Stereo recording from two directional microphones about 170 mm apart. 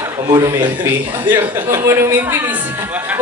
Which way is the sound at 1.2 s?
10° right (ahead or behind).